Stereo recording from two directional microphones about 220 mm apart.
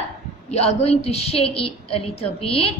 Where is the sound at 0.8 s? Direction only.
30° left (ahead or behind).